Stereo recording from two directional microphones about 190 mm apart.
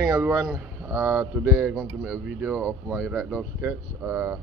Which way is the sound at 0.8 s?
15° right (ahead or behind).